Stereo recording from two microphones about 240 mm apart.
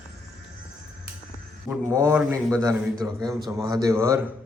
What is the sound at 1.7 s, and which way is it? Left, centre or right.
A man's voice, centre.